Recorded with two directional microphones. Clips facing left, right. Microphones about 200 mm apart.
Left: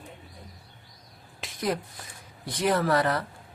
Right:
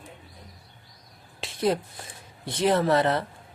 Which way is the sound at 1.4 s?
30° right (ahead or behind).